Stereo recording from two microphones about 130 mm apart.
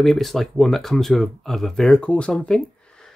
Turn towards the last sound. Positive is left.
turn(degrees=5)  # may be behind; listen again after turning